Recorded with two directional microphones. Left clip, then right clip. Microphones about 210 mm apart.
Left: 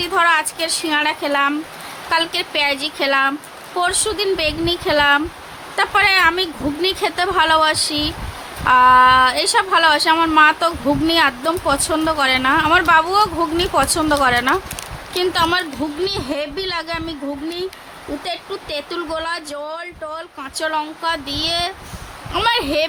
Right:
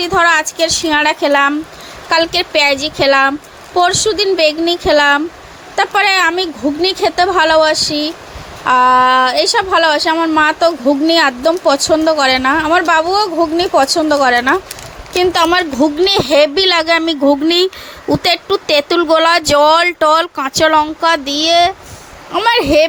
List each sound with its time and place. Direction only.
0.0 s a woman's voice: 20° right (ahead or behind)